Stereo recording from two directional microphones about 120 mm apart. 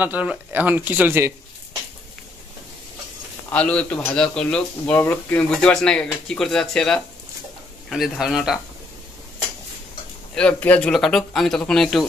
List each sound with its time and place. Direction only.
0.0 s speech: 10° right (ahead or behind)
3.5 s a man's voice: 10° left (ahead or behind)
4.9 s a man's voice: 20° left (ahead or behind)
5.5 s speech: 5° left (ahead or behind)
10.3 s a man's voice: 10° left (ahead or behind)